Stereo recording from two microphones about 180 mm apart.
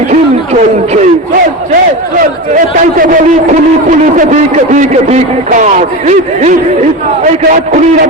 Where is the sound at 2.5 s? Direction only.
45° right (ahead or behind).